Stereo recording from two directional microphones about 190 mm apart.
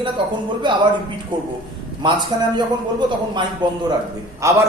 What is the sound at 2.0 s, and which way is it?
A man's voice, 25° right (ahead or behind).